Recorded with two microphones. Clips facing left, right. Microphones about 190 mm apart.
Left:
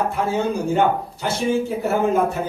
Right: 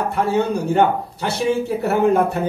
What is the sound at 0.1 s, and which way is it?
Speech, 65° right (ahead or behind).